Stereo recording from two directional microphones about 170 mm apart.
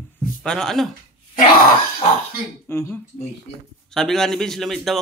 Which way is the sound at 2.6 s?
15° left (ahead or behind).